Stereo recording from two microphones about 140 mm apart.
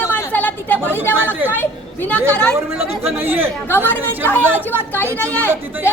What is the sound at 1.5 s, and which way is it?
Speech, 15° left (ahead or behind).